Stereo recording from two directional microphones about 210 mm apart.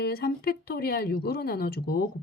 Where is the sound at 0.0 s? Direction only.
45° left (ahead or behind).